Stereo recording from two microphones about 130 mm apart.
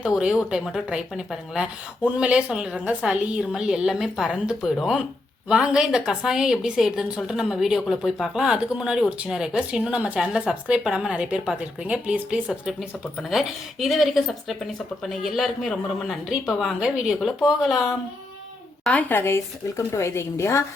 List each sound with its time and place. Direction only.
0.2 s a woman's voice: 5° right (ahead or behind)
18.9 s speech: 10° left (ahead or behind)